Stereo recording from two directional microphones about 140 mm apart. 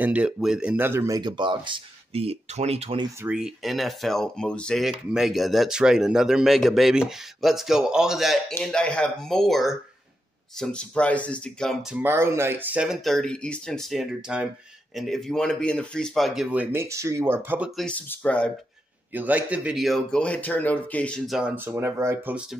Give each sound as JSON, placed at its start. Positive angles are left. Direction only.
{"t": 0.0, "sound": "speech", "side_deg": -10}
{"t": 3.3, "sound": "speech", "side_deg": -5}
{"t": 12.0, "sound": "speech", "side_deg": -15}
{"t": 16.7, "sound": "speech", "side_deg": -20}
{"t": 17.6, "sound": "speech", "side_deg": 0}
{"t": 17.9, "sound": "speech", "side_deg": 10}
{"t": 19.1, "sound": "speech", "side_deg": -10}
{"t": 21.3, "sound": "speech", "side_deg": -5}
{"t": 21.5, "sound": "speech", "side_deg": -15}